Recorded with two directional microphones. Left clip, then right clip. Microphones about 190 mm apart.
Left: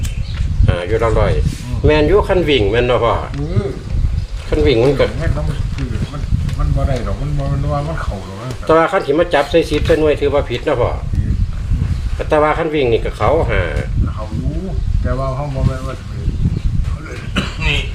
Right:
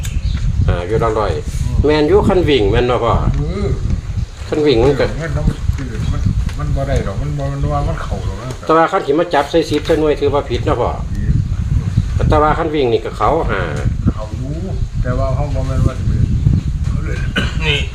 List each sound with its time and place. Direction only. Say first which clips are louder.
0.6 s speech: even; 15° right (ahead or behind)
4.4 s speech: right 1 dB; 20° right (ahead or behind)
8.6 s speech: even; 15° right (ahead or behind)
12.3 s speech: even; 15° right (ahead or behind)
15.0 s speech: right 1 dB; 5° left (ahead or behind)
17.3 s a sound: right 1 dB; 5° left (ahead or behind)